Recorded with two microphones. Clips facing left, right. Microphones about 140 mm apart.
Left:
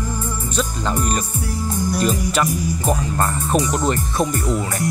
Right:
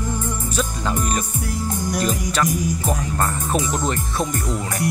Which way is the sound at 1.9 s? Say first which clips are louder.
Left 3 dB; 5° left (ahead or behind).